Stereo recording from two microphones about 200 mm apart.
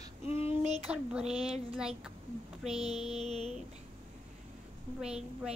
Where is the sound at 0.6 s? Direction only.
35° right (ahead or behind).